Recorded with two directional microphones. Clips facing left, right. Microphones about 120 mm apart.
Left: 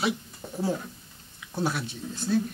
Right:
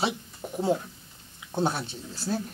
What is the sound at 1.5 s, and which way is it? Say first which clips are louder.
Speech: right 2 dB; 25° right (ahead or behind).